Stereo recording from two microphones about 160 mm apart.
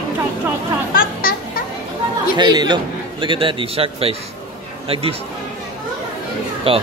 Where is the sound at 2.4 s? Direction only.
25° right (ahead or behind).